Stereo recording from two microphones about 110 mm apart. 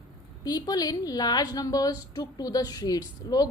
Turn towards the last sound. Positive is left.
turn(degrees=35)  # may be behind; listen again after turning